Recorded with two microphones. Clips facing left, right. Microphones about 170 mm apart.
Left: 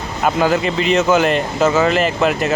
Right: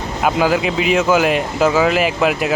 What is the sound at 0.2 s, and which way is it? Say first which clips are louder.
Speech: even; 5° right (ahead or behind).